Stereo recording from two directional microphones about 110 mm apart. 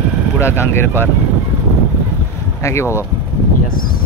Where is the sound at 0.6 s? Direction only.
20° left (ahead or behind).